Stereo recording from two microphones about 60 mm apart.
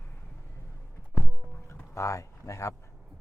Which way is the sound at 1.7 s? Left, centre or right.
Left.